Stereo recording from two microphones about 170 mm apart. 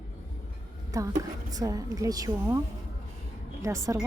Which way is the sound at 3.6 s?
20° right (ahead or behind).